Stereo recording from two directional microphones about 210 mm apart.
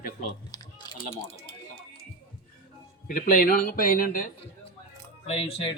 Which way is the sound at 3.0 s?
40° left (ahead or behind).